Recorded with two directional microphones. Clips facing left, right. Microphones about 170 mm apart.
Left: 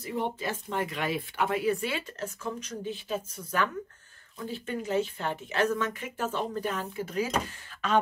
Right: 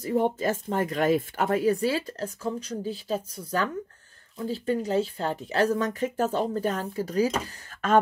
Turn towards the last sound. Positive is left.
turn(degrees=-45)  # may be behind; listen again after turning